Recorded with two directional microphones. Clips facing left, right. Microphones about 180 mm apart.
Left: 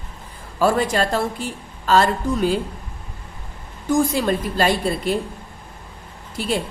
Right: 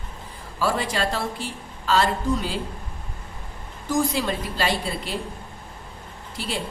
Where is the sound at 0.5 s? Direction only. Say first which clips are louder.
Left 6 dB; 50° left (ahead or behind).